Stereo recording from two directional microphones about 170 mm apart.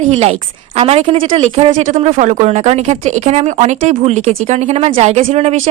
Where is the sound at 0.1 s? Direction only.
40° right (ahead or behind).